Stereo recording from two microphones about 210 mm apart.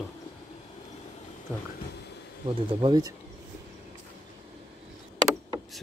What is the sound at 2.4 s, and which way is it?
Speech, 20° right (ahead or behind).